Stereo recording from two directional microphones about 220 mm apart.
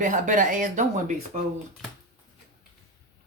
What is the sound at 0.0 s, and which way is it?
Speech, 35° right (ahead or behind).